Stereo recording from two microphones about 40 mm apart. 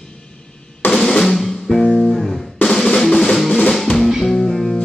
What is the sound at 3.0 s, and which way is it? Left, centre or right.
Music, centre.